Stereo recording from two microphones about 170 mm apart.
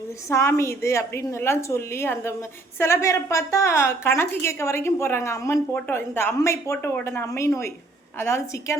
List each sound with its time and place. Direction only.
0.3 s a woman's voice: 15° left (ahead or behind)